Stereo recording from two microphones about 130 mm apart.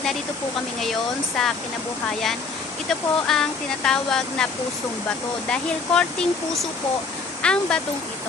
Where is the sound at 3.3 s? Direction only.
Centre (ahead or behind).